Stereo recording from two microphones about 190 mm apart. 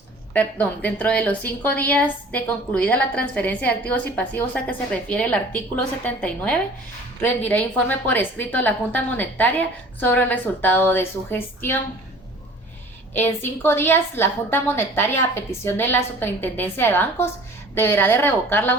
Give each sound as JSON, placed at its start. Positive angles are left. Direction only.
{"t": 0.3, "sound": "a woman's voice", "side_deg": 10}
{"t": 13.1, "sound": "a woman's voice", "side_deg": 10}